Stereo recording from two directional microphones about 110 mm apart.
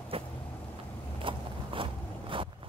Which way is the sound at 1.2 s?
50° right (ahead or behind).